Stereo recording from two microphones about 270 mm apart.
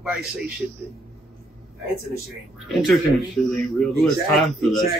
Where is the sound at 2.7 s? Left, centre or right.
Centre.